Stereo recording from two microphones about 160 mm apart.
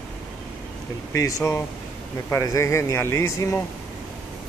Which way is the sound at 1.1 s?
20° left (ahead or behind).